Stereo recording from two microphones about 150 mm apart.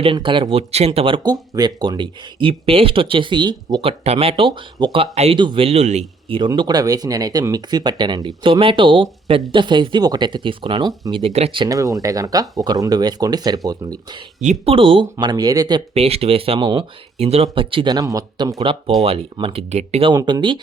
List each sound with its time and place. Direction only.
0.0 s speech: 35° right (ahead or behind)
6.3 s speech: 30° right (ahead or behind)
11.2 s speech: 45° right (ahead or behind)
11.7 s speech: 25° right (ahead or behind)
14.4 s speech: 45° right (ahead or behind); by 15.8 s 25° right (ahead or behind)
16.0 s speech: 40° right (ahead or behind); by 18.5 s 25° right (ahead or behind)
19.0 s speech: 35° right (ahead or behind)
20.1 s speech: 30° right (ahead or behind)